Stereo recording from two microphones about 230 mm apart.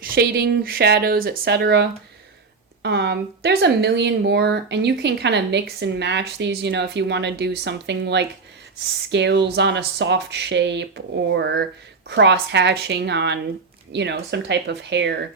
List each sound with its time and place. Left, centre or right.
0.0 s speech: right